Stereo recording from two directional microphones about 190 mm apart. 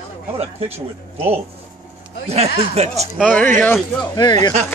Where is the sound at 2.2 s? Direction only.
35° right (ahead or behind).